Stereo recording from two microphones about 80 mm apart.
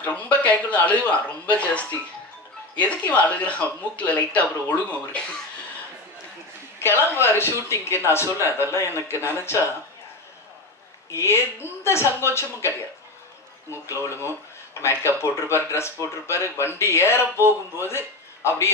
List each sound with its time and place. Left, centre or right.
0.0 s speech: centre
6.8 s speech: left
11.1 s speech: left